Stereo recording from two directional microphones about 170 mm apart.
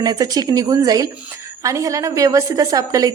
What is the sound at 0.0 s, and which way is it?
A woman's voice, 20° right (ahead or behind).